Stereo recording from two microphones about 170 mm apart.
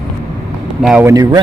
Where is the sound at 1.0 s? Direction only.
20° right (ahead or behind).